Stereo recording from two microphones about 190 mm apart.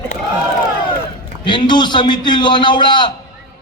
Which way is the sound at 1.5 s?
25° left (ahead or behind).